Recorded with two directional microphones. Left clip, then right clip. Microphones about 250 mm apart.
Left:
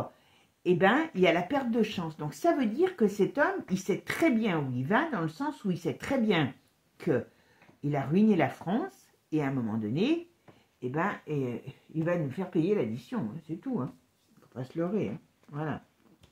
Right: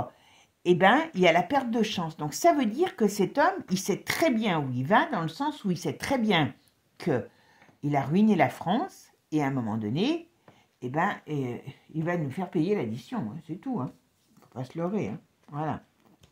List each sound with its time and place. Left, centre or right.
0.7 s speech: right